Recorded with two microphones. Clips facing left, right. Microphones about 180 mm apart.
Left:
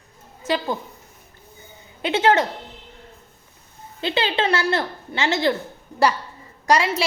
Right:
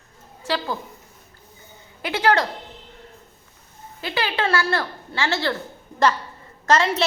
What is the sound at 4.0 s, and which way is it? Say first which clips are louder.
A woman's voice: left 2 dB; 25° left (ahead or behind).